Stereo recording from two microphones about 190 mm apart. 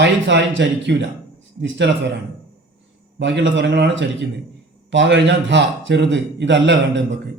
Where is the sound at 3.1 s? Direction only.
70° right (ahead or behind).